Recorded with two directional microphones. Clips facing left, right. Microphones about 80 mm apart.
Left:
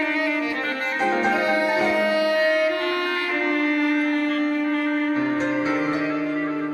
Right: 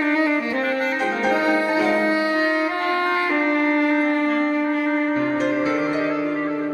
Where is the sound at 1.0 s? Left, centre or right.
Centre.